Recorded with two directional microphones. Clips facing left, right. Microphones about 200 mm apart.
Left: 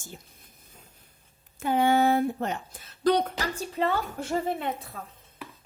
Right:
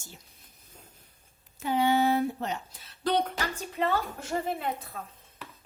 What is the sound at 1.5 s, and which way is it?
A woman's voice, 50° left (ahead or behind).